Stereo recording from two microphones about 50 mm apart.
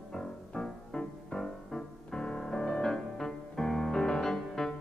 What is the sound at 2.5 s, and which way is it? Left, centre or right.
Music, centre.